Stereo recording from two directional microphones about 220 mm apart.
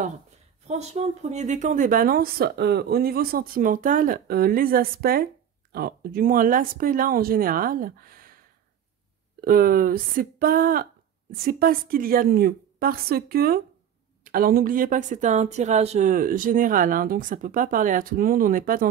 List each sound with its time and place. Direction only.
0.7 s speech: 30° right (ahead or behind)
9.4 s a woman's voice: 40° right (ahead or behind)